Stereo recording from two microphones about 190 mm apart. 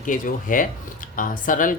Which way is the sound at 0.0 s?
45° left (ahead or behind).